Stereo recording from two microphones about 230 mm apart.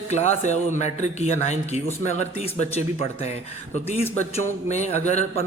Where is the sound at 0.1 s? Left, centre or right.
Left.